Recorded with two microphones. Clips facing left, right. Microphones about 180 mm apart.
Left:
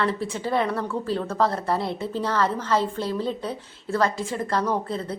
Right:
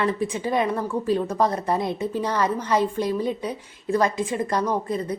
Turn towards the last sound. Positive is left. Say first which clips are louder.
# right 1 dB
turn(degrees=-15)  # may be behind; listen again after turning